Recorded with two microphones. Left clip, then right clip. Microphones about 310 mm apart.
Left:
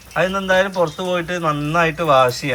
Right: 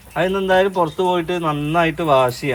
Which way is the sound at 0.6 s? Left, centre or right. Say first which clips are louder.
Right 2 dB; centre.